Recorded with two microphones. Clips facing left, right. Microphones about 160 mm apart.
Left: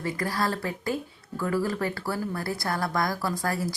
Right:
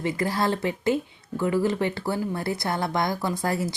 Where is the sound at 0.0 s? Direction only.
25° right (ahead or behind).